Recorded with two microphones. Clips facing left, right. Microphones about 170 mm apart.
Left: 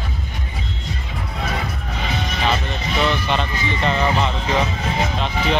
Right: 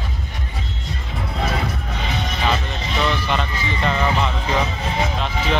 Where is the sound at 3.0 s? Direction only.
Centre (ahead or behind).